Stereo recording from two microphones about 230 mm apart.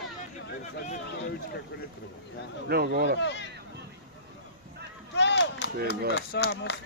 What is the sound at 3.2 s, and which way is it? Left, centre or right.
Speech, left.